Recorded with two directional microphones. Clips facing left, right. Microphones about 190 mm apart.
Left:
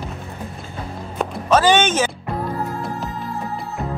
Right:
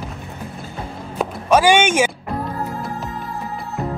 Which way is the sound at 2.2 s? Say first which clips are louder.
Even; centre (ahead or behind).